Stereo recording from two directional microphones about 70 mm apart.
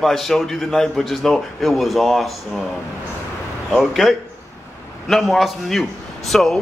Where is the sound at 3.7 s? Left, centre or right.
Centre.